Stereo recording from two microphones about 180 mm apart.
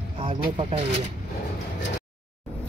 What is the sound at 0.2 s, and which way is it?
Speech, 30° right (ahead or behind).